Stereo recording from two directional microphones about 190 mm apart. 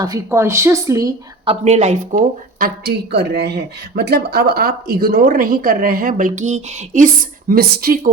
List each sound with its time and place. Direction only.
0.0 s speech: 15° right (ahead or behind)
1.5 s speech: 35° right (ahead or behind); by 8.1 s 50° right (ahead or behind)